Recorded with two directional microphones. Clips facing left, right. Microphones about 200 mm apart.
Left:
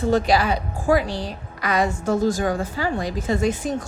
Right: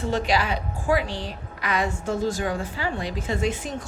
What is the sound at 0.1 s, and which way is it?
A woman's voice, 40° left (ahead or behind).